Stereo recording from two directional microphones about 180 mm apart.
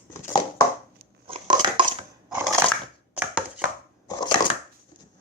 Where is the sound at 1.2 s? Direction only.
30° right (ahead or behind).